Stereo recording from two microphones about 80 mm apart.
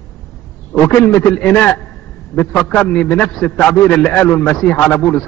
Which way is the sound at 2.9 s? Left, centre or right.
Centre.